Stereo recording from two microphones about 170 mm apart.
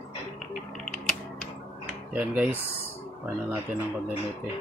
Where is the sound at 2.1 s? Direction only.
10° right (ahead or behind).